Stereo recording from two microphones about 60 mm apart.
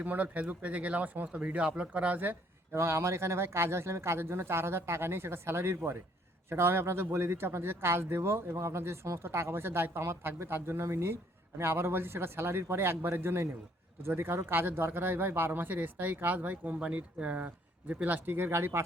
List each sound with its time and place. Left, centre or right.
0.0 s speech: right
2.7 s speech: right